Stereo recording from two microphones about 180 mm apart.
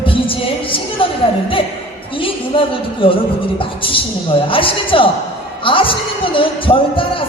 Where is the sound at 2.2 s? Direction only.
30° left (ahead or behind).